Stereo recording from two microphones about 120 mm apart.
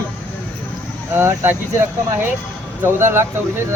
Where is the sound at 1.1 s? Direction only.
20° right (ahead or behind).